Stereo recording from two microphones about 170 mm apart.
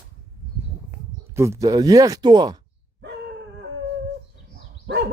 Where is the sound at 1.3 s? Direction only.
15° right (ahead or behind).